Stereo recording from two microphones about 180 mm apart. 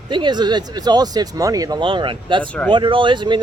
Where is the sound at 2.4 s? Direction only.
5° left (ahead or behind).